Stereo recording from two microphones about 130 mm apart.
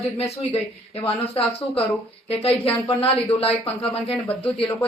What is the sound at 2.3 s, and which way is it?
Speech, 50° left (ahead or behind).